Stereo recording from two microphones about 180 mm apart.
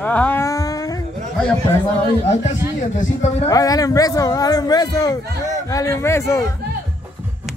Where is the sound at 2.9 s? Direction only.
40° left (ahead or behind).